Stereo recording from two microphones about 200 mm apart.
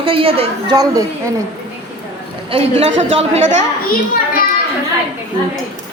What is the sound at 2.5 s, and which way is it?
Speech, 30° right (ahead or behind).